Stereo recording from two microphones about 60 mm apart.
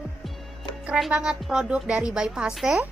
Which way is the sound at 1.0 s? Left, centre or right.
Centre.